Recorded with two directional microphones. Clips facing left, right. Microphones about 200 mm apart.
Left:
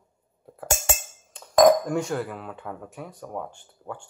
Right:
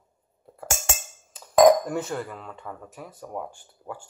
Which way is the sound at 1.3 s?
Centre (ahead or behind).